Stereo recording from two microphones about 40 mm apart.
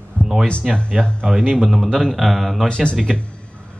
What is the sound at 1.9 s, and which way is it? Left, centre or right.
Speech, centre.